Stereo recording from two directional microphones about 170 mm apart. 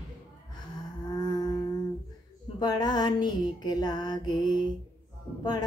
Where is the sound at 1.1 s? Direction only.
25° left (ahead or behind).